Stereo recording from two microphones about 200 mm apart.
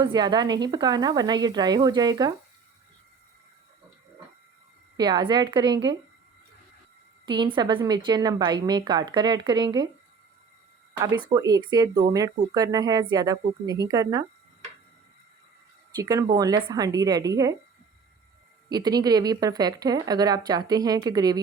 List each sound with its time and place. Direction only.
0.0 s speech: 20° right (ahead or behind)
4.9 s speech: 20° right (ahead or behind)
7.3 s speech: 20° right (ahead or behind)
11.3 s speech: 20° right (ahead or behind)
16.0 s speech: 20° right (ahead or behind)
18.7 s speech: 20° right (ahead or behind)